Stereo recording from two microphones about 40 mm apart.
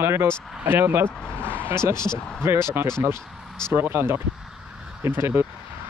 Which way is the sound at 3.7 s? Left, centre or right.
Right.